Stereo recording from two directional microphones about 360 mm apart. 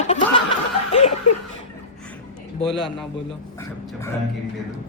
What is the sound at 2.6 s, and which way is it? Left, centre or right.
Speech, centre.